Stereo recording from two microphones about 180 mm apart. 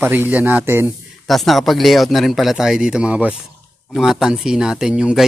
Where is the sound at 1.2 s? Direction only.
Centre (ahead or behind).